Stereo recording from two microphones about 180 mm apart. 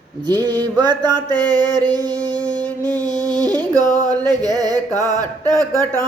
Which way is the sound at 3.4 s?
20° right (ahead or behind).